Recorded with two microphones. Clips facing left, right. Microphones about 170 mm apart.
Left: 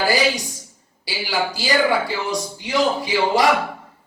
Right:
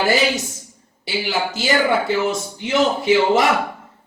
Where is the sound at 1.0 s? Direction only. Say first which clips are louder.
Right 1 dB; 25° right (ahead or behind).